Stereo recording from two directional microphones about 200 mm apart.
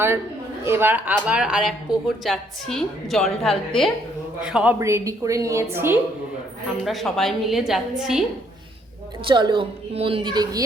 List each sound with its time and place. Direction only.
0.6 s a woman's voice: 10° right (ahead or behind)
6.8 s a woman's voice: centre (ahead or behind)
9.2 s a woman's voice: 25° right (ahead or behind)